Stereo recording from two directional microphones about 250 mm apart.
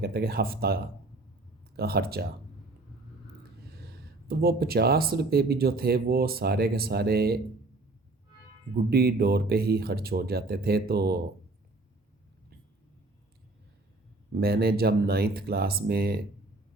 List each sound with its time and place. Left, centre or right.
0.0 s speech: right
3.8 s speech: right
8.7 s speech: right
14.3 s speech: right